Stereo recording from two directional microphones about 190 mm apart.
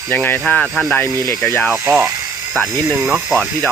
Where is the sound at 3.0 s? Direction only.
Centre (ahead or behind).